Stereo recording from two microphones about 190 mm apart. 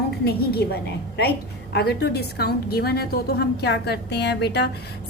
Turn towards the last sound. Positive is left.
turn(degrees=60)  # may be behind; listen again after turning